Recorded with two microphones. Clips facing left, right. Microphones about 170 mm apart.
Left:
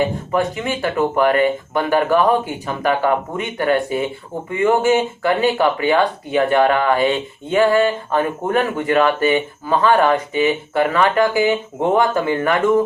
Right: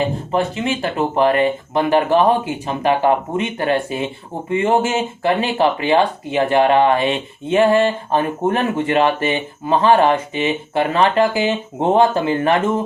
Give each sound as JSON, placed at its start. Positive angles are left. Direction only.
{"t": 0.3, "sound": "speech", "side_deg": -25}